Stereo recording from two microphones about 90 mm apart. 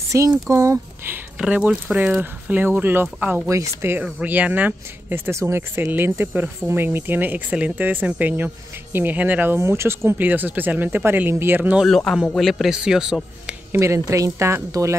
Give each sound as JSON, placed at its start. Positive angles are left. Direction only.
{"t": 0.1, "sound": "speech", "side_deg": -35}
{"t": 1.4, "sound": "speech", "side_deg": -15}
{"t": 3.4, "sound": "speech", "side_deg": -35}
{"t": 4.0, "sound": "speech", "side_deg": -15}
{"t": 11.9, "sound": "speech", "side_deg": 5}
{"t": 13.7, "sound": "speech", "side_deg": -30}